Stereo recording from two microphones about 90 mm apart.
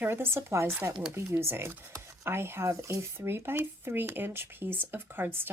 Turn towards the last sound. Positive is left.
turn(degrees=-25)  # may be behind; listen again after turning